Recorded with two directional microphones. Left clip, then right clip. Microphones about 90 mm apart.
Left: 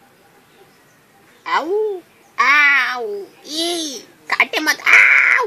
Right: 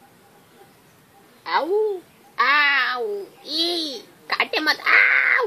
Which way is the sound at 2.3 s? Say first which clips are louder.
Left 5 dB; 25° left (ahead or behind).